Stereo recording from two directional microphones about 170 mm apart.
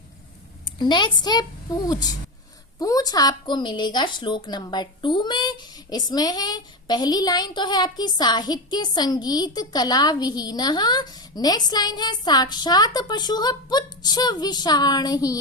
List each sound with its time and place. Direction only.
0.6 s a woman's voice: 25° left (ahead or behind)